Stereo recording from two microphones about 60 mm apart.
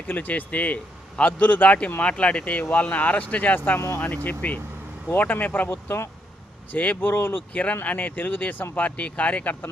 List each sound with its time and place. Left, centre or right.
0.1 s speech: left
3.8 s speech: left
4.0 s speech: left
5.7 s speech: left
6.7 s speech: left
7.5 s speech: left